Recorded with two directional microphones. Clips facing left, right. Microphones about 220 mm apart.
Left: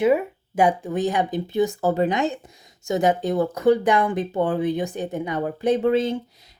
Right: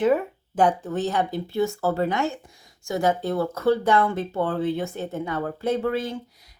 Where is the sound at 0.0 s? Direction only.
10° left (ahead or behind).